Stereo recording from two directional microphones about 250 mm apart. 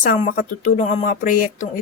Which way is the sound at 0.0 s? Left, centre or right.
Left.